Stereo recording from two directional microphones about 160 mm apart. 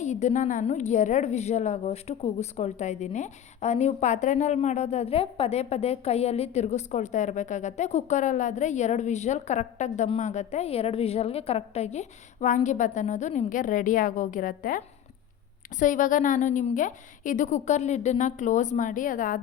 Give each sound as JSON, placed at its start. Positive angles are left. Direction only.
{"t": 0.0, "sound": "a woman's voice", "side_deg": 45}